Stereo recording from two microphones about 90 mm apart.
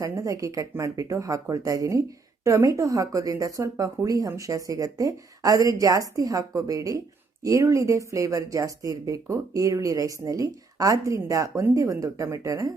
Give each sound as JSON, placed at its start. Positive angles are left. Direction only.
{"t": 0.0, "sound": "speech", "side_deg": -40}